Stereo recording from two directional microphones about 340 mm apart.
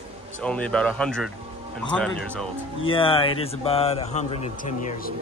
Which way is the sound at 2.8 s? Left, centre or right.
Centre.